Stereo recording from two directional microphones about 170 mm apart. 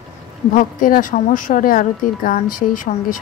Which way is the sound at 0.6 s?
55° left (ahead or behind).